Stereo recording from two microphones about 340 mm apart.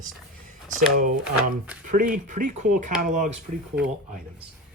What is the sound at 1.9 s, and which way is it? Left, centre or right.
Speech, right.